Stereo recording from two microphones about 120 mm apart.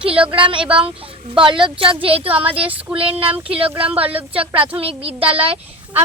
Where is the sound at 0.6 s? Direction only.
10° right (ahead or behind).